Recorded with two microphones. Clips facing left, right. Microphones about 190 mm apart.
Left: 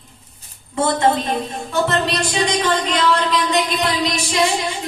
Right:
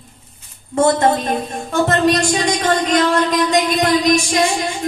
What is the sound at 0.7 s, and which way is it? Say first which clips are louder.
A woman's voice: right 3 dB; 50° right (ahead or behind).